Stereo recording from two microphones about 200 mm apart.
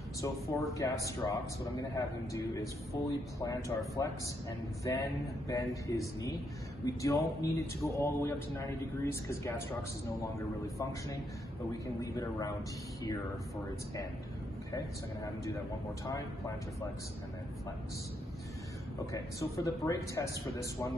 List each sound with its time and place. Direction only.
0.2 s a man's voice: 15° left (ahead or behind)
12.0 s a man's voice: 15° left (ahead or behind)
19.1 s a man's voice: 15° left (ahead or behind)